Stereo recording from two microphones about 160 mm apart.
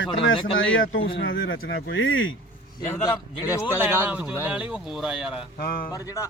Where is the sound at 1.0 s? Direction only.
80° left.